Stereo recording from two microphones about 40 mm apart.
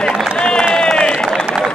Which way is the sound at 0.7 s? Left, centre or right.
Centre.